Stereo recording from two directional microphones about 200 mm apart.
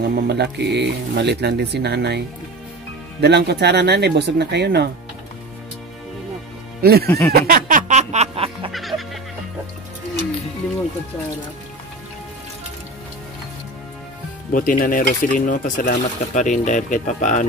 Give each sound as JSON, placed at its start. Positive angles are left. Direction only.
{"t": 0.0, "sound": "speech", "side_deg": -55}
{"t": 6.8, "sound": "speech", "side_deg": -50}
{"t": 7.1, "sound": "speech", "side_deg": 10}
{"t": 7.3, "sound": "music", "side_deg": -45}
{"t": 8.7, "sound": "music", "side_deg": 0}
{"t": 14.5, "sound": "speech", "side_deg": 40}